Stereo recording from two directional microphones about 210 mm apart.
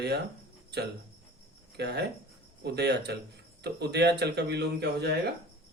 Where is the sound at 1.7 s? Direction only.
50° right (ahead or behind).